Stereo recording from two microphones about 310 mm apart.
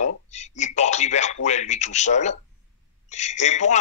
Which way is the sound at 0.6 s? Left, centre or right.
Left.